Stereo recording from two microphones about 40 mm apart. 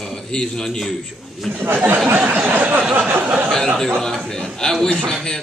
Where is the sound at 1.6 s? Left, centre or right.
Right.